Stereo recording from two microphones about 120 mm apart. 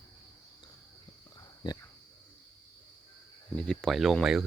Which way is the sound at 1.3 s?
35° left (ahead or behind).